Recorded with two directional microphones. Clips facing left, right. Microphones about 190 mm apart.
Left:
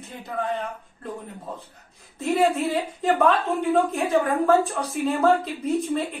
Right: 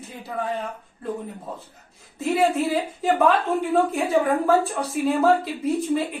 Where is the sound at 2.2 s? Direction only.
Centre (ahead or behind).